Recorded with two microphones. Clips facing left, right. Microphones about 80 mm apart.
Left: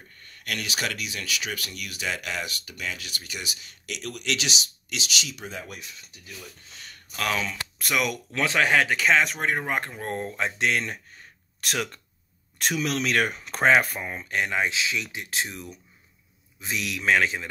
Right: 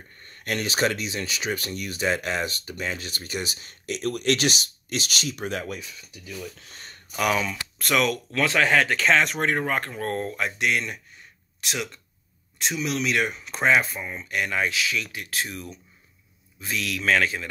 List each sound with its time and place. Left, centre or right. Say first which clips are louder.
0.2 s speech: right 5 dB; right
6.7 s a sound: right 2 dB; right
7.2 s speech: right 4 dB; centre
7.8 s speech: right 4 dB; centre; by 11.0 s left
11.6 s speech: left 2 dB; left
14.0 s speech: even; left